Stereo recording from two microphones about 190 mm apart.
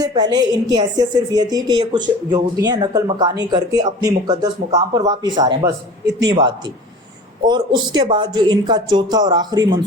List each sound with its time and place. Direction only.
0.0 s speech: 20° right (ahead or behind)